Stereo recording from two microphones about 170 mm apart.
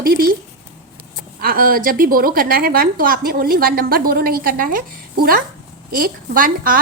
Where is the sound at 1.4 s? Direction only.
60° right (ahead or behind).